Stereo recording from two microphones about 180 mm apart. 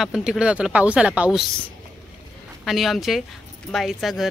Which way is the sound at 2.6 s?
Centre (ahead or behind).